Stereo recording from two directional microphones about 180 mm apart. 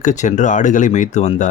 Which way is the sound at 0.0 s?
40° left (ahead or behind).